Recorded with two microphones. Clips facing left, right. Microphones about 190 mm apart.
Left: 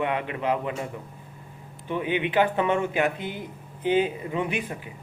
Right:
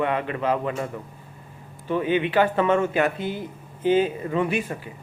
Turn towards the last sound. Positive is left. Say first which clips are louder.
# right 4 dB
turn(degrees=15)  # may be behind; listen again after turning